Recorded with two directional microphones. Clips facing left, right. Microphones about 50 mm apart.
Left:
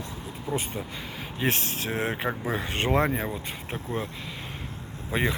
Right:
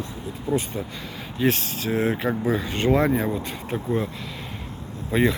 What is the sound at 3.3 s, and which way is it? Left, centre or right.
Speech, centre.